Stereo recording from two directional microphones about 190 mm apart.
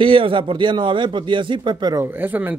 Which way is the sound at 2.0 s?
10° right (ahead or behind).